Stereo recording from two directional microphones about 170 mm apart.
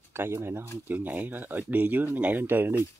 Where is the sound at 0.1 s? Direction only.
15° right (ahead or behind).